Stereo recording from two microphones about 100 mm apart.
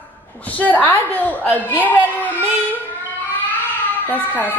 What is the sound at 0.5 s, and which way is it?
A woman's voice, 15° left (ahead or behind).